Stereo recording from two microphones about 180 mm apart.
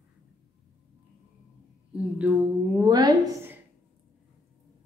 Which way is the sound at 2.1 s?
5° right (ahead or behind).